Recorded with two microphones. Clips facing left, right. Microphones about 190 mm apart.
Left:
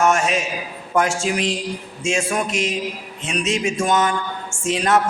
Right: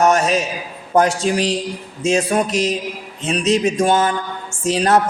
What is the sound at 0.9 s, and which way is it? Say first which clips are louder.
A woman's voice: right 4 dB; 35° right (ahead or behind).